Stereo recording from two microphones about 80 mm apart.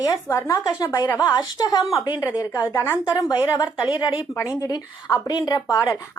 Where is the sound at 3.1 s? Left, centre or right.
Left.